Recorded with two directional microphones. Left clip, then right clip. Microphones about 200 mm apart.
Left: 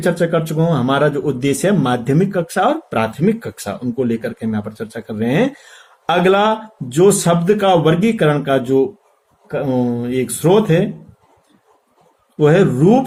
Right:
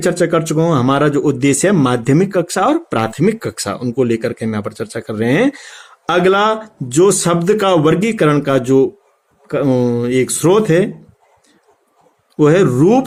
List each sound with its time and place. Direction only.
0.0 s speech: 50° right (ahead or behind)
12.4 s speech: 45° right (ahead or behind)